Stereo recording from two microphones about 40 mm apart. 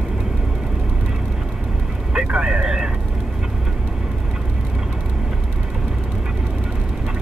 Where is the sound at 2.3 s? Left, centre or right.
Right.